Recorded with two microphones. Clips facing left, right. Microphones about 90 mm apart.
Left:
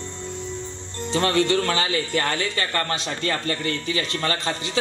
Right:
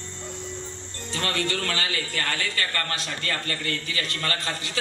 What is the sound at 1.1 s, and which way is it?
Speech, 25° left (ahead or behind).